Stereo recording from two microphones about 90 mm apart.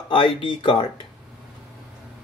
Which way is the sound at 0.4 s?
75° left (ahead or behind).